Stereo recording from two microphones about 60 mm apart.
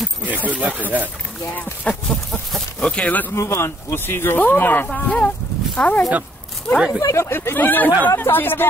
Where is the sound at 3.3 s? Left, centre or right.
Left.